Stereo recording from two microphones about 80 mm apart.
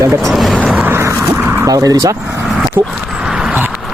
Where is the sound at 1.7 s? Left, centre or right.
Right.